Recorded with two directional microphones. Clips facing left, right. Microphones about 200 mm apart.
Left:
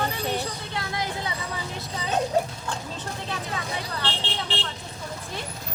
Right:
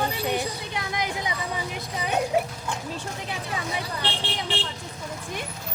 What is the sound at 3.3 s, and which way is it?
Speech, 15° right (ahead or behind).